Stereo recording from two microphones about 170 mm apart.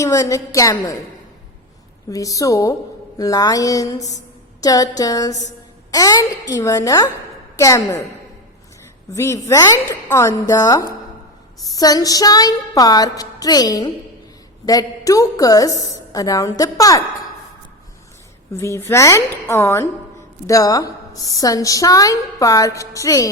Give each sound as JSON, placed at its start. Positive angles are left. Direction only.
{"t": 0.0, "sound": "a woman's voice", "side_deg": 20}
{"t": 2.0, "sound": "a woman's voice", "side_deg": 20}
{"t": 9.1, "sound": "a woman's voice", "side_deg": 15}
{"t": 18.5, "sound": "a woman's voice", "side_deg": 15}